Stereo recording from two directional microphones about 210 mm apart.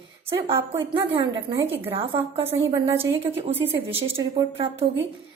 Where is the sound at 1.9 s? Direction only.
25° right (ahead or behind).